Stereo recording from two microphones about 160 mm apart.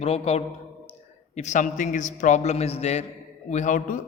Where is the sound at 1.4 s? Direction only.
50° left (ahead or behind).